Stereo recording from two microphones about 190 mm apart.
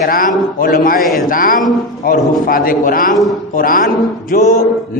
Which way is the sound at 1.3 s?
45° left (ahead or behind).